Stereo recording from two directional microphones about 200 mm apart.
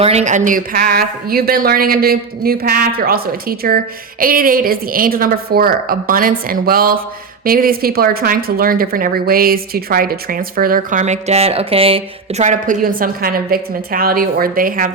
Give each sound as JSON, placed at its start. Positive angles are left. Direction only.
{"t": 0.0, "sound": "speech", "side_deg": -30}